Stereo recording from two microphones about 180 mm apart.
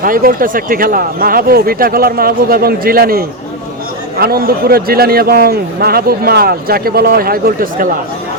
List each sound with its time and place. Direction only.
0.0 s a man's voice: 50° right (ahead or behind)